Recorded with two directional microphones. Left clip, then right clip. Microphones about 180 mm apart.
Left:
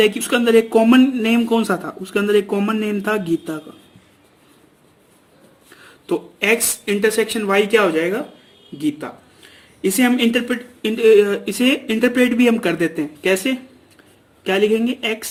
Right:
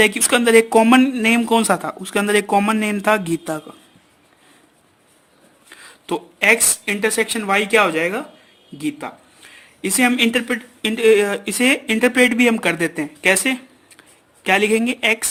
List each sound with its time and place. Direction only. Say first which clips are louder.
0.0 s speech: right 1 dB; 40° right (ahead or behind)
5.8 s speech: left 2 dB; 35° right (ahead or behind)